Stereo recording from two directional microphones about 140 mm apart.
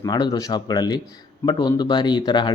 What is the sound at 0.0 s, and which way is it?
Speech, 30° left (ahead or behind).